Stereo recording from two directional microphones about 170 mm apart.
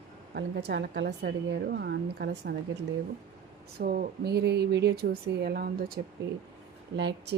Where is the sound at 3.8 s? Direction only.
60° right (ahead or behind).